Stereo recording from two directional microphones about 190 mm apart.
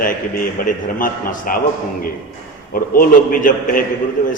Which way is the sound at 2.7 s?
50° left (ahead or behind).